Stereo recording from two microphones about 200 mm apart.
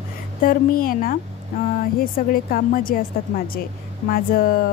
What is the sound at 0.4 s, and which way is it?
A woman's voice, 45° left (ahead or behind).